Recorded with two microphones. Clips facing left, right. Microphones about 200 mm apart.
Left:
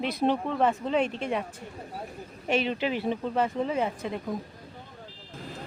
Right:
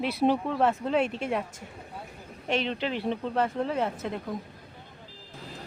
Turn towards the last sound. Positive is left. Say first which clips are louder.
# left 1 dB
turn(degrees=0)  # may be behind; listen again after turning